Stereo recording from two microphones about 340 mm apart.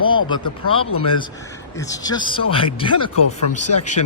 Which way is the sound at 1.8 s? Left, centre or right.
Centre.